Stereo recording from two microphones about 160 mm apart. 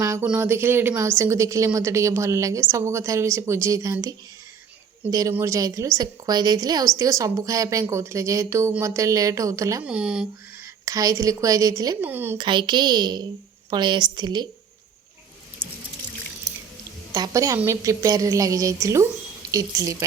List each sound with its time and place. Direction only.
0.0 s a sound: 20° right (ahead or behind)
0.3 s a woman's voice: 10° right (ahead or behind)
5.3 s a woman's voice: 20° right (ahead or behind)
9.8 s speech: 5° right (ahead or behind)
10.8 s a woman's voice: 20° right (ahead or behind)
12.4 s a woman's voice: 30° right (ahead or behind)
17.2 s a woman's voice: 25° right (ahead or behind)